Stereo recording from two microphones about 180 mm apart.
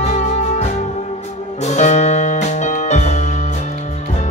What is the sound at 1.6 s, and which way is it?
Music, 40° left (ahead or behind).